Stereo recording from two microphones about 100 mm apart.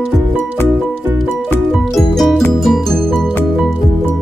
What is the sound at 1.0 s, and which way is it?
Music, 20° right (ahead or behind).